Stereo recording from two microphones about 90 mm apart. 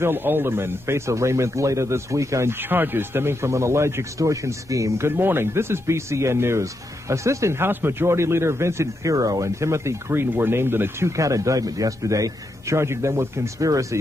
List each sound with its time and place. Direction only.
0.0 s speech: 20° right (ahead or behind)
2.7 s speech: 25° right (ahead or behind); by 13.8 s 40° right (ahead or behind)